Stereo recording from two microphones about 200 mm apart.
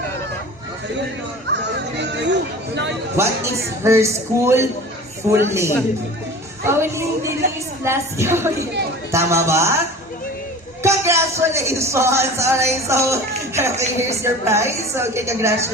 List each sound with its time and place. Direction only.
2.0 s a sound: 60° right (ahead or behind)
3.2 s speech: 15° right (ahead or behind)
10.8 s speech: 15° right (ahead or behind)